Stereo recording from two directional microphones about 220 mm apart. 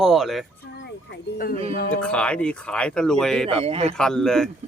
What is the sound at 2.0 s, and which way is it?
Speech, 5° left (ahead or behind).